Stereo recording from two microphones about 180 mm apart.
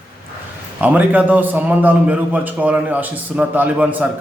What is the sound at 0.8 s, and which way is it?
A man's voice, 10° right (ahead or behind).